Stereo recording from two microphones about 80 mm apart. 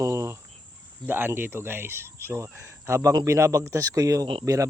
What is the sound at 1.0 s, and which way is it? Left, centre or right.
Speech, right.